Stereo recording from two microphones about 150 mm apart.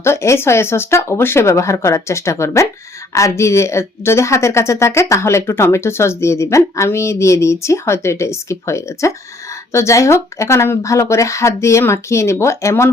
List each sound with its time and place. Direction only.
0.0 s a woman's voice: 20° left (ahead or behind)